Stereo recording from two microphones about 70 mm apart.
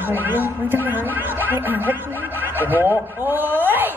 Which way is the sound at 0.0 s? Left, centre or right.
Right.